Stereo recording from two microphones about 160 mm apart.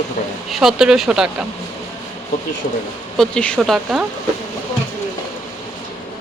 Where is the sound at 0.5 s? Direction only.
Centre (ahead or behind).